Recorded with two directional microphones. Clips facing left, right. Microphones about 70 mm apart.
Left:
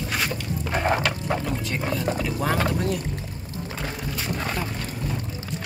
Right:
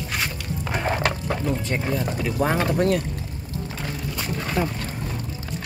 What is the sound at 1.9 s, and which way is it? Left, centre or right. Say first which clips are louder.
Speech: right 1 dB; centre.